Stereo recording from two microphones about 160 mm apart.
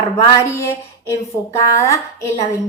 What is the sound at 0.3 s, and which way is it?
A woman's voice, 15° left (ahead or behind).